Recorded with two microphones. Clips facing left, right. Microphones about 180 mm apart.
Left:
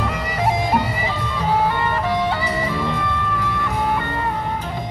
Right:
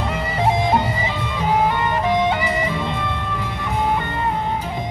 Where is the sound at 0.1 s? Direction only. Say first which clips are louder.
Right 1 dB; 25° right (ahead or behind).